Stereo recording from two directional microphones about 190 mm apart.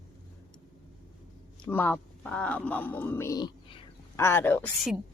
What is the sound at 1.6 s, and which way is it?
Speech, 10° left (ahead or behind).